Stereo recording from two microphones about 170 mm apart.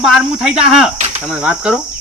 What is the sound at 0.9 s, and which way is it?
Cricket, 40° right (ahead or behind).